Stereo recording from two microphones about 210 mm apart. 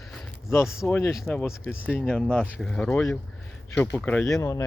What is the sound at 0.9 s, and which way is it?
Speech, 10° left (ahead or behind).